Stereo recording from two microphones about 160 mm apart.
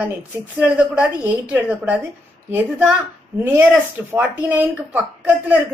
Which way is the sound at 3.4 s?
15° right (ahead or behind).